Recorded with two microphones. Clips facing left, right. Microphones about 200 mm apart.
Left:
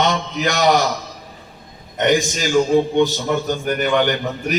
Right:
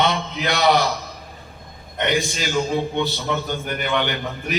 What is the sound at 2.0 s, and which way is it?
A man's voice, 45° left (ahead or behind).